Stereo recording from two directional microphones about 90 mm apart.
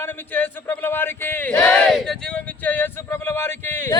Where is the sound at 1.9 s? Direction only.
5° left (ahead or behind).